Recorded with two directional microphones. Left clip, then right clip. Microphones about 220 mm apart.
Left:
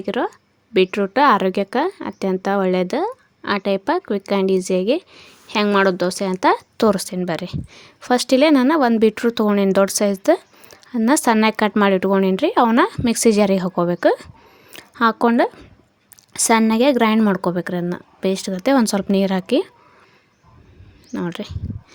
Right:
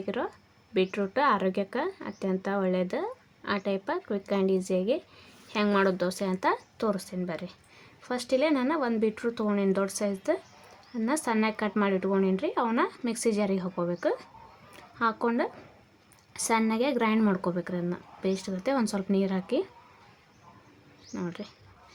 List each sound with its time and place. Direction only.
0.0 s a woman's voice: 35° left (ahead or behind)
14.7 s a sound: 40° left (ahead or behind)
16.3 s a woman's voice: 40° left (ahead or behind)
21.1 s a woman's voice: 40° left (ahead or behind)